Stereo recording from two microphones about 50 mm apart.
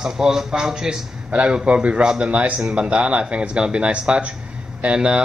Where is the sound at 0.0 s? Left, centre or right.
Centre.